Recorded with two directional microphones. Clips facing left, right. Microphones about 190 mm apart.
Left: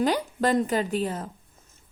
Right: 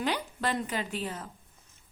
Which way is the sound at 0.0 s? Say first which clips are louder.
Left 7 dB; 40° left (ahead or behind).